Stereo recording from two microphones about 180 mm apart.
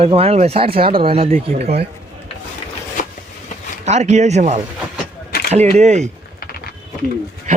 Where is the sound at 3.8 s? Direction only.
40° right (ahead or behind).